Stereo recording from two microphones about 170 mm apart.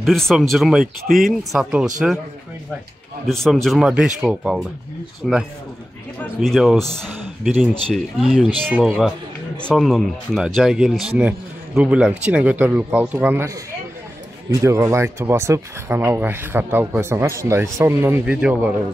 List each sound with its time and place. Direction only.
0.0 s speech: centre (ahead or behind)
3.3 s speech: 5° left (ahead or behind)
6.4 s speech: centre (ahead or behind)
14.5 s speech: 20° right (ahead or behind)